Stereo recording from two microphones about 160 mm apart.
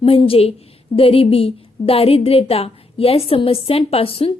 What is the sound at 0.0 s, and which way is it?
A woman's voice, 35° left (ahead or behind).